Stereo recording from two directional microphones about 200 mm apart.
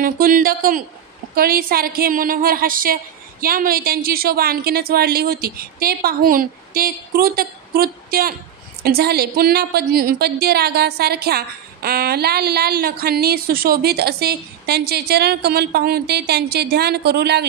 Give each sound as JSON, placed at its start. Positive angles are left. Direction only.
{"t": 0.0, "sound": "a woman's voice", "side_deg": -45}